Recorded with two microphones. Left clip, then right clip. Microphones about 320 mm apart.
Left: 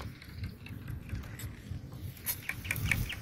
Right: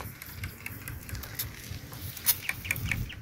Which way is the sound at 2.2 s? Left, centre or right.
Centre.